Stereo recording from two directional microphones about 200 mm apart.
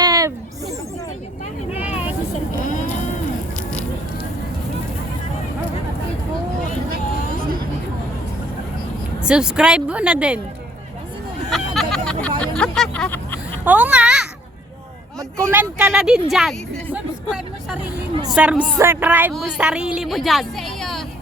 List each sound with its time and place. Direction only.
0.0 s a sound: 20° right (ahead or behind)
1.8 s vehicle: 5° right (ahead or behind)
9.2 s a woman's voice: 5° right (ahead or behind)
11.5 s hubbub: centre (ahead or behind)
13.7 s children playing: 5° right (ahead or behind)
15.4 s a sound: 10° right (ahead or behind)
18.3 s a woman's voice: 5° right (ahead or behind)